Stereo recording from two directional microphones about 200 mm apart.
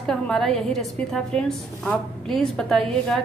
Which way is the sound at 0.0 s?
Centre (ahead or behind).